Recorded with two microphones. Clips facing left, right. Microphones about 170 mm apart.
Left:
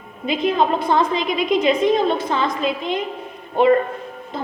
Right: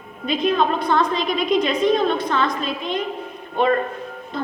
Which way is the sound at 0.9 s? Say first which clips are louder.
Left 1 dB; 25° left (ahead or behind).